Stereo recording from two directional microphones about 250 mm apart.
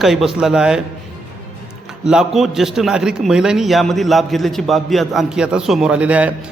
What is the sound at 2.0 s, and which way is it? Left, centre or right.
A man's voice, centre.